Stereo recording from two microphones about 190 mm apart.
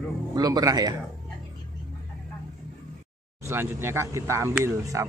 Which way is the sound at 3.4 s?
15° right (ahead or behind).